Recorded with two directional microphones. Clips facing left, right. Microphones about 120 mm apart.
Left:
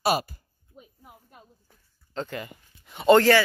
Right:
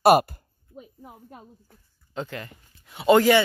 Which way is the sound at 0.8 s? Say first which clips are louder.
Right 7 dB; 35° right (ahead or behind).